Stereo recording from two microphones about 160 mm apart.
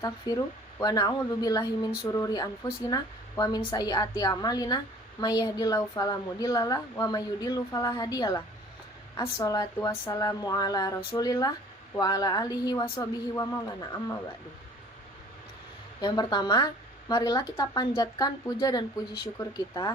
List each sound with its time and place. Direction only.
0.3 s a woman's voice: 25° left (ahead or behind)
16.0 s a woman's voice: 25° left (ahead or behind)